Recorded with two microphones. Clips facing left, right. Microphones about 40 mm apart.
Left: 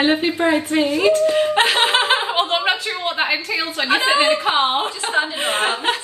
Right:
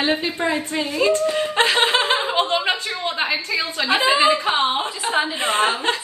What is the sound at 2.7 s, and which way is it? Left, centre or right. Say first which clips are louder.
A woman's voice: left 2 dB; left.